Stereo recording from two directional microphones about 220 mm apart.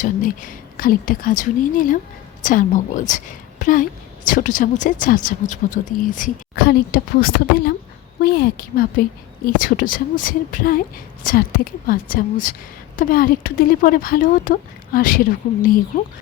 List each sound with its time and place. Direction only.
0.0 s a woman's voice: 40° left (ahead or behind)